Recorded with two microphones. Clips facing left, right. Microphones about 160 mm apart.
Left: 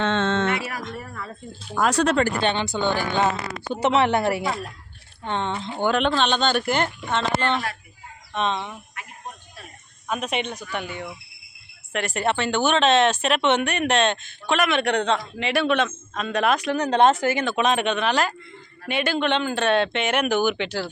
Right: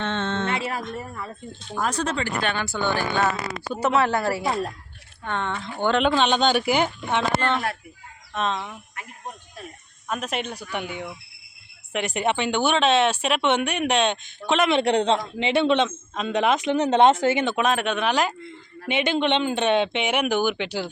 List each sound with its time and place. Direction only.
0.0 s music: 90° left
0.5 s music: 25° right (ahead or behind)
1.7 s speech: 80° left
2.4 s speech: 25° left (ahead or behind)
4.4 s a man's voice: 25° right (ahead or behind)
5.2 s speech: 25° left (ahead or behind)
6.0 s speech: 10° right (ahead or behind)
10.1 s a man's voice: centre (ahead or behind); by 17.6 s 20° right (ahead or behind)
17.6 s speech: 5° right (ahead or behind)